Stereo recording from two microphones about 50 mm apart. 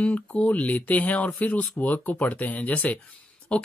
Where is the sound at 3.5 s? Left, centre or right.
Left.